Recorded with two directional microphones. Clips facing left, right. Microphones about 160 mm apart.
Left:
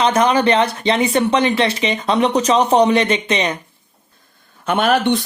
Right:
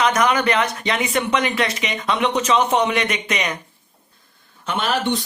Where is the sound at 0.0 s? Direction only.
30° left (ahead or behind).